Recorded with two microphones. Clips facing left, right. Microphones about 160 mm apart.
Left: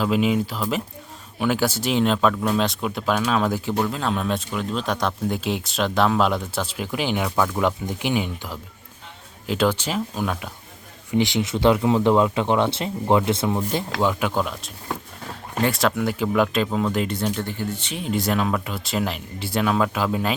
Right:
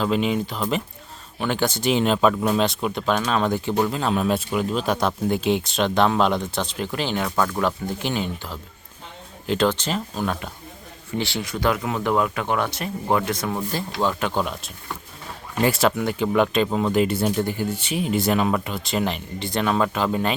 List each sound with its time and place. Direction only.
0.0 s speech: 5° left (ahead or behind)
7.6 s speech: 15° left (ahead or behind)
11.1 s speech: 20° left (ahead or behind); by 20.3 s 5° left (ahead or behind)